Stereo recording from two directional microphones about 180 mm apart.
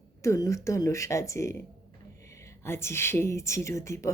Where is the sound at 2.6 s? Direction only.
15° left (ahead or behind).